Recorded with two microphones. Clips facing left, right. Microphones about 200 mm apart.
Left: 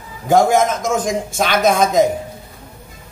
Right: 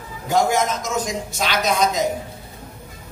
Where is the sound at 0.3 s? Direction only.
50° left (ahead or behind).